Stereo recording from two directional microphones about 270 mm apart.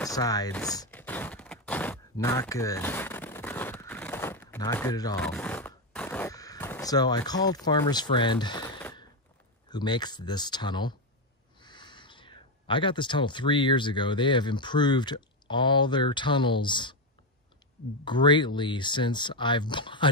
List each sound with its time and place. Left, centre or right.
0.0 s speech: centre
0.7 s a sound: centre
9.7 s speech: centre
18.0 s speech: centre